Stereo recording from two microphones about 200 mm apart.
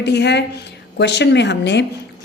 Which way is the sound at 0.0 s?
60° left (ahead or behind).